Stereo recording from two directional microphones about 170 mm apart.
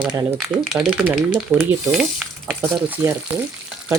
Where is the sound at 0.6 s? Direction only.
Centre (ahead or behind).